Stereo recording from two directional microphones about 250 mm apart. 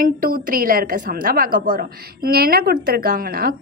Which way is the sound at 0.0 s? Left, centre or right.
Right.